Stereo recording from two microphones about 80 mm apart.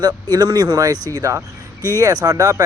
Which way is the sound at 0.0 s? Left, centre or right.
Right.